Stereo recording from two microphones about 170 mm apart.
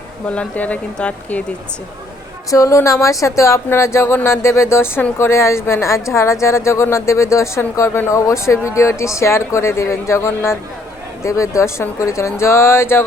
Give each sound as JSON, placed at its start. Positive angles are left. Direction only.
{"t": 0.3, "sound": "speech", "side_deg": 10}
{"t": 2.5, "sound": "speech", "side_deg": 20}